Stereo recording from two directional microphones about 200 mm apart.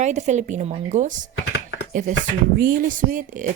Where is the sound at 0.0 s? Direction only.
35° right (ahead or behind).